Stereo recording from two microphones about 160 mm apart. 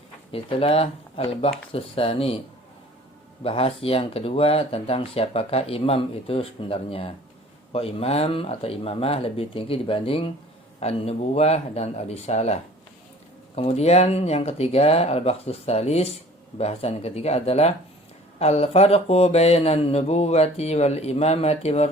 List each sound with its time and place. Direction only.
0.3 s speech: 35° left (ahead or behind)
3.4 s speech: 35° left (ahead or behind)